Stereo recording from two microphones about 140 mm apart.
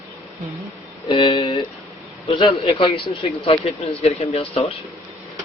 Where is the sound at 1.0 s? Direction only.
35° left (ahead or behind).